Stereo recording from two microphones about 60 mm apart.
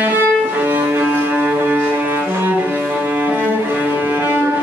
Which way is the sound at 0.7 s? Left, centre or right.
Right.